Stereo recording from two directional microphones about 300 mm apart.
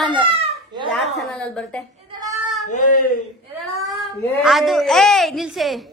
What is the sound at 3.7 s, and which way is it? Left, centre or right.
A woman's voice, centre.